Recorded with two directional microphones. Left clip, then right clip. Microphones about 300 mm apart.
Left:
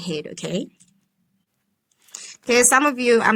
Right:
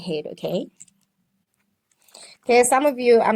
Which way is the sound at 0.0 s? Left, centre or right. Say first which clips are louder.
Right 1 dB; centre.